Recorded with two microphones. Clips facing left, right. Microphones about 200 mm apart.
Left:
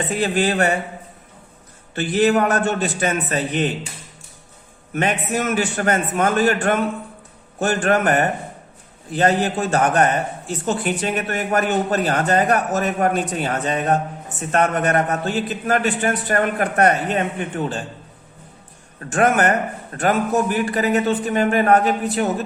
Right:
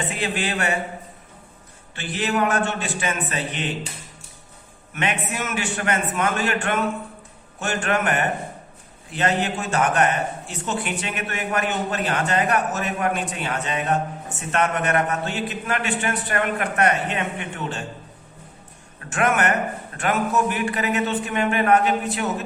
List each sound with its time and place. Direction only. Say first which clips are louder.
0.1 s a man's voice: left 6 dB; 40° left (ahead or behind)
2.0 s a man's voice: left 7 dB; 40° left (ahead or behind)
4.9 s a man's voice: left 5 dB; 40° left (ahead or behind)
18.9 s a man's voice: left 4 dB; 35° left (ahead or behind)